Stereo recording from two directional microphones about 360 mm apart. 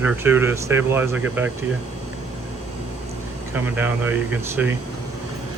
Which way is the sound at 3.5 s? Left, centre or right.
Centre.